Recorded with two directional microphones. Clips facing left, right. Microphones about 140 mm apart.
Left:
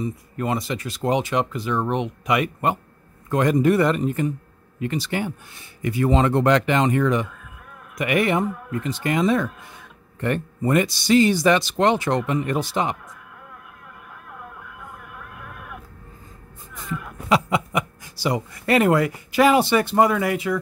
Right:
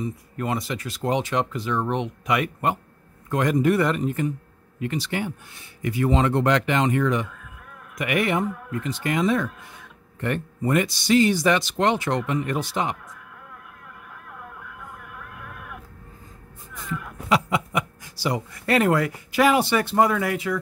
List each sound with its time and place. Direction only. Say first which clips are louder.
0.4 s speech: left 2 dB; 25° left (ahead or behind)
16.7 s a man's voice: left 1 dB; 25° left (ahead or behind)